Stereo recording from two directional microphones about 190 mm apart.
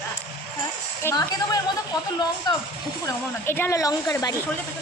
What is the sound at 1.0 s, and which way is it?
Speech, 10° left (ahead or behind).